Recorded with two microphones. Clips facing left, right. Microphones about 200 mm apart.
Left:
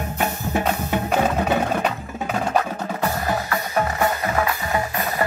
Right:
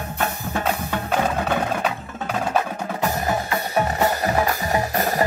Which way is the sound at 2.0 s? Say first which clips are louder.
Left 2 dB; 15° left (ahead or behind).